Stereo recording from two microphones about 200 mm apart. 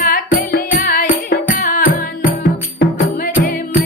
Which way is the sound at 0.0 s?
45° left (ahead or behind).